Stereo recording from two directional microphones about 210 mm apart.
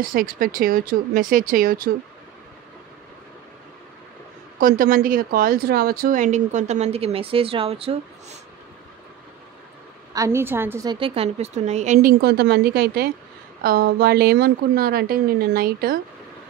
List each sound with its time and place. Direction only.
0.0 s a woman's voice: 40° right (ahead or behind)
4.6 s speech: 40° right (ahead or behind); by 8.4 s 25° right (ahead or behind)
10.1 s a woman's voice: 15° right (ahead or behind); by 16.0 s 45° right (ahead or behind)